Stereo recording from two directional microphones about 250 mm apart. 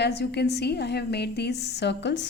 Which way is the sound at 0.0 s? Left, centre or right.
Left.